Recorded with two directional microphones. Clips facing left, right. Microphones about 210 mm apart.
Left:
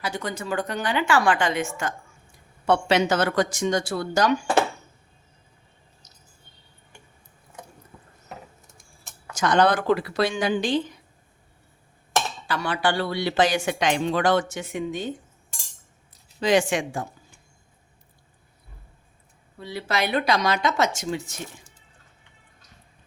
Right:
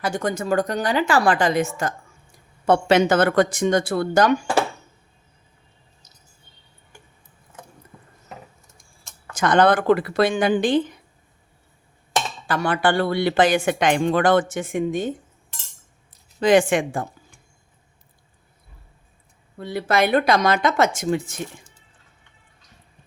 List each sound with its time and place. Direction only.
0.0 s a woman's voice: 45° right (ahead or behind)
9.3 s speech: 55° right (ahead or behind)
12.5 s speech: 50° right (ahead or behind)
16.4 s speech: 55° right (ahead or behind)
19.5 s speech: 50° right (ahead or behind)